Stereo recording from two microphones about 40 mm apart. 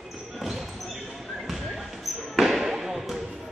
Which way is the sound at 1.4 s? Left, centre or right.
Centre.